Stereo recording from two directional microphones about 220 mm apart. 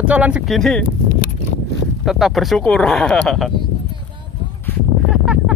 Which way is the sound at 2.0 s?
Centre (ahead or behind).